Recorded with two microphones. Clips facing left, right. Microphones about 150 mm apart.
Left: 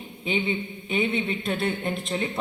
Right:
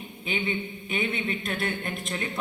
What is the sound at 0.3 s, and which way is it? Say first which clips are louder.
A woman's voice: left 3 dB; 25° left (ahead or behind).